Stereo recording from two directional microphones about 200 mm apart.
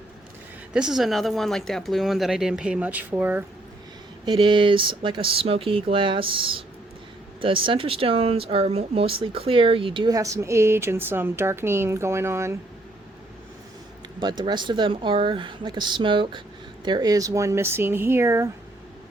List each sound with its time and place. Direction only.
0.7 s speech: 5° right (ahead or behind)
4.3 s speech: 25° right (ahead or behind)
14.2 s speech: 20° right (ahead or behind)